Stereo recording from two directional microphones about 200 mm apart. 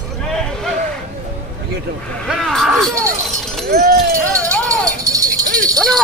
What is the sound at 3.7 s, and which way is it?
Run, 50° right (ahead or behind).